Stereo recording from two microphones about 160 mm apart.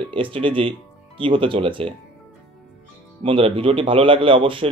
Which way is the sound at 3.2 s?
35° right (ahead or behind).